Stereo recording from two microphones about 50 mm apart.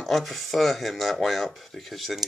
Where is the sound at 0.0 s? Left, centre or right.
Centre.